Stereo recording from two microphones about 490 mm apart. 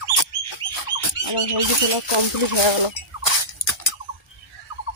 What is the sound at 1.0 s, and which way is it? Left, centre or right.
Rodents, left.